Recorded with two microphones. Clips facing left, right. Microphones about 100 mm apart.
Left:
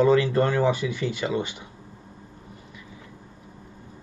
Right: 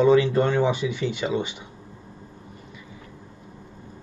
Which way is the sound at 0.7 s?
45° left (ahead or behind).